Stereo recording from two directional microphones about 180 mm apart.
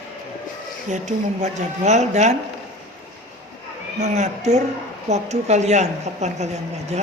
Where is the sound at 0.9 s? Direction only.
40° right (ahead or behind).